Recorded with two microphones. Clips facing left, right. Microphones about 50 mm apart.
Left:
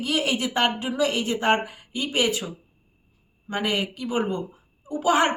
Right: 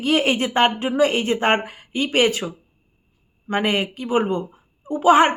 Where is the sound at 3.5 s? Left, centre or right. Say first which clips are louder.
Right 5 dB; right.